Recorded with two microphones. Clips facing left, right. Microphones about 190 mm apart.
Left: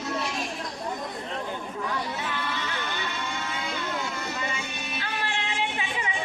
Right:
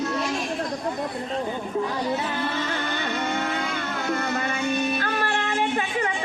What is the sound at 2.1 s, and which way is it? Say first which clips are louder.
Music: right 6 dB; 40° right (ahead or behind).